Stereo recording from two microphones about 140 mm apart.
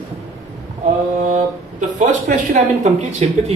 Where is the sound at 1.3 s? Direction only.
65° right (ahead or behind).